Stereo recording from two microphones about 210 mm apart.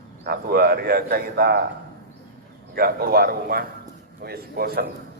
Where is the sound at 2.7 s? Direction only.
45° right (ahead or behind).